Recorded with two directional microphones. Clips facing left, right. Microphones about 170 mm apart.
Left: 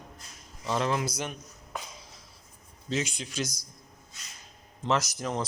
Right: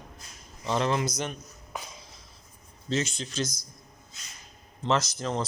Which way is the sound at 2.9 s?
10° left (ahead or behind).